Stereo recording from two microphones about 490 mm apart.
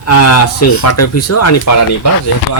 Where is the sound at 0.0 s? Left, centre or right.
Left.